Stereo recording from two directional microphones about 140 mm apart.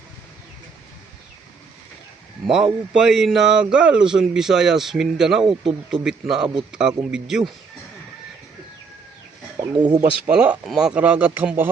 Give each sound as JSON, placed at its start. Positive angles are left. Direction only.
{"t": 2.9, "sound": "speech", "side_deg": -5}
{"t": 9.7, "sound": "speech", "side_deg": -30}
{"t": 10.0, "sound": "speech", "side_deg": -10}